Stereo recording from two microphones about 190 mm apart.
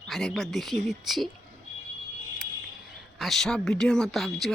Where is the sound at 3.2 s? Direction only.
Centre (ahead or behind).